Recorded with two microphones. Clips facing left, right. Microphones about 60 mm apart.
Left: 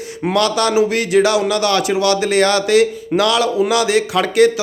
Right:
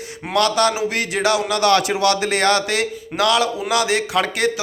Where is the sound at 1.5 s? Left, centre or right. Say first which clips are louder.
Left 1 dB; right.